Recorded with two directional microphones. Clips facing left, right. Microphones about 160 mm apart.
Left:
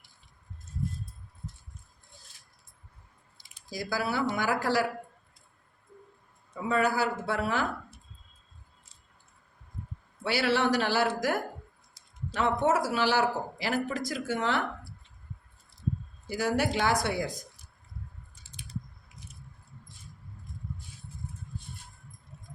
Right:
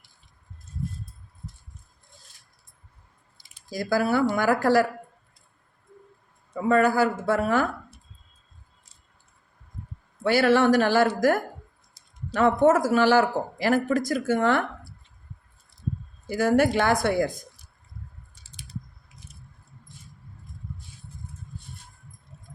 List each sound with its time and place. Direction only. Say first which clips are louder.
3.7 s speech: right 8 dB; 50° right (ahead or behind)
6.5 s speech: right 7 dB; 50° right (ahead or behind)
10.2 s speech: right 7 dB; 50° right (ahead or behind)
16.3 s speech: right 7 dB; 50° right (ahead or behind)